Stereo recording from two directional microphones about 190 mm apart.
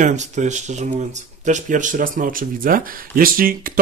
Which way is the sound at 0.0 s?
40° right (ahead or behind).